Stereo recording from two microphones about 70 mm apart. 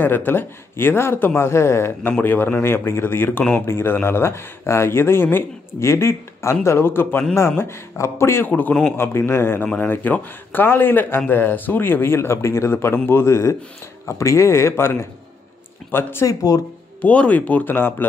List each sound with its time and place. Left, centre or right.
0.0 s speech: left
2.0 s speech: left
8.5 s speech: left
8.9 s speech: left
16.3 s speech: left
17.0 s speech: left